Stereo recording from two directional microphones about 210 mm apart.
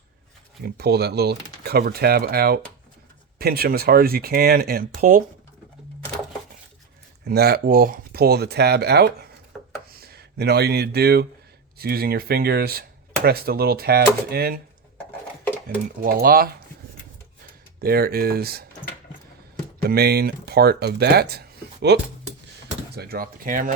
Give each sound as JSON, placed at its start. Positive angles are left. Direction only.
{"t": 0.6, "sound": "speech", "side_deg": -50}
{"t": 7.3, "sound": "speech", "side_deg": -50}
{"t": 16.0, "sound": "speech", "side_deg": -45}
{"t": 17.7, "sound": "speech", "side_deg": -45}
{"t": 19.9, "sound": "speech", "side_deg": -50}
{"t": 23.0, "sound": "speech", "side_deg": -45}